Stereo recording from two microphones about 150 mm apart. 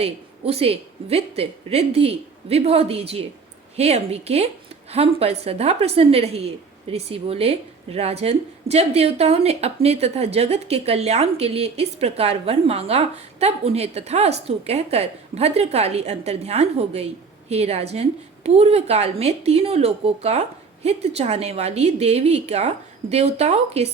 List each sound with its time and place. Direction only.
0.0 s a woman's voice: 40° right (ahead or behind)